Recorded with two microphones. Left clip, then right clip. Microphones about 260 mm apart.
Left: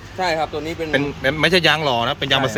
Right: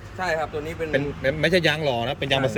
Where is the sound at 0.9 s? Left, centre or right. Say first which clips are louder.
Left 4 dB; centre.